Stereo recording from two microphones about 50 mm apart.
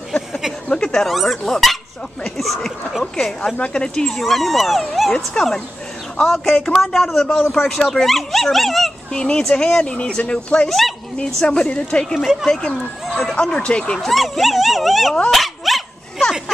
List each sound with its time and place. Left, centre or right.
0.7 s a sound: centre
1.0 s speech: centre
3.5 s speech: left
4.2 s speech: centre
5.1 s speech: centre
6.7 s speech: centre
9.1 s speech: centre
10.7 s speech: centre
11.1 s speech: centre
14.0 s speech: centre
15.3 s dog: centre